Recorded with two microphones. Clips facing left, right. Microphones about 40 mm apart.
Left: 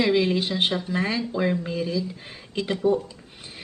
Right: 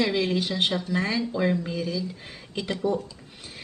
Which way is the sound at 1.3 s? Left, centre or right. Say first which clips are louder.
Even; centre.